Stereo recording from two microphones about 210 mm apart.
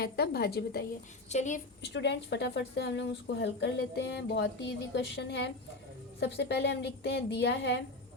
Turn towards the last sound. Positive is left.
turn(degrees=55)  # may be behind; listen again after turning